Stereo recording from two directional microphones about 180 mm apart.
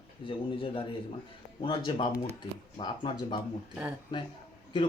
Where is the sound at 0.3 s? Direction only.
30° left (ahead or behind).